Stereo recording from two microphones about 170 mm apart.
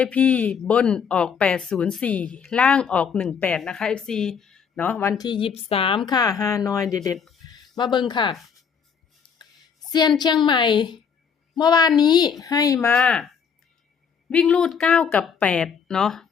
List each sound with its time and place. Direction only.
0.0 s a woman's voice: 10° left (ahead or behind); by 6.0 s 30° left (ahead or behind)
6.1 s speech: 20° left (ahead or behind)
10.2 s a woman's voice: 25° left (ahead or behind); by 16.3 s centre (ahead or behind)